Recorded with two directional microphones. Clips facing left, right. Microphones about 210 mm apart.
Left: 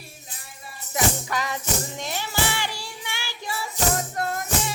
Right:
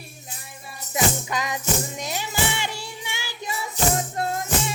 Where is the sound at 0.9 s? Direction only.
20° right (ahead or behind).